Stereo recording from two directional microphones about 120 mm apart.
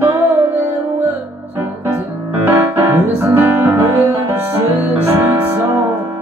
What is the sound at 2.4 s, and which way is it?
Music, 15° right (ahead or behind).